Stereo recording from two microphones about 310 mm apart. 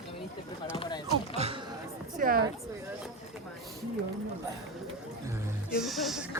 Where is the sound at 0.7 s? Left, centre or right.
Centre.